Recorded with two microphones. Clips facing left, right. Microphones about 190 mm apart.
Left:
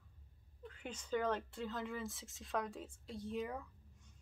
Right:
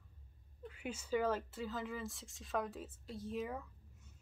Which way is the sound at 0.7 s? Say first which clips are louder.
Right 2 dB; 10° right (ahead or behind).